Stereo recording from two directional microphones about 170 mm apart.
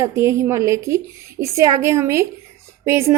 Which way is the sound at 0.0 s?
15° right (ahead or behind).